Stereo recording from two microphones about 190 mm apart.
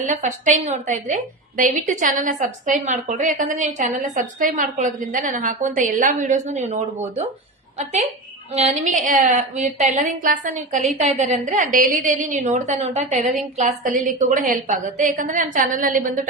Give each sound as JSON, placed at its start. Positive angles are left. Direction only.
{"t": 0.0, "sound": "a woman's voice", "side_deg": -40}
{"t": 8.5, "sound": "a woman's voice", "side_deg": -35}